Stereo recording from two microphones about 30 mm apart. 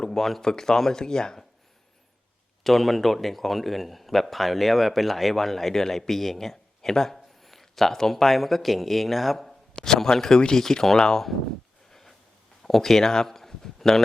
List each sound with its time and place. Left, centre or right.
0.2 s speech: centre
0.4 s speech: left
2.6 s speech: centre
9.7 s a man's voice: centre
11.9 s a sound: centre
12.6 s speech: centre